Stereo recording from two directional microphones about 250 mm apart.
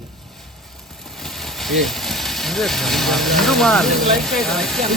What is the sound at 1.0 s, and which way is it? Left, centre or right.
Speech, centre.